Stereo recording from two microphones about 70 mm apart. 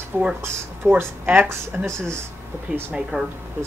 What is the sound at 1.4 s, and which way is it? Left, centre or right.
Speech, right.